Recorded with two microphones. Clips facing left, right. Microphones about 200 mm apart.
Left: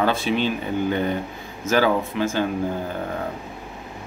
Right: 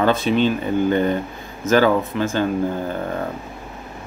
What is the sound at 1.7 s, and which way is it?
Speech, 10° left (ahead or behind).